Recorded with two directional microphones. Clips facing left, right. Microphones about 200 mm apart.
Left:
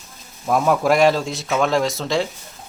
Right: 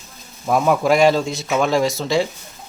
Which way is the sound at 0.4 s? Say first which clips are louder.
Right 1 dB; centre (ahead or behind).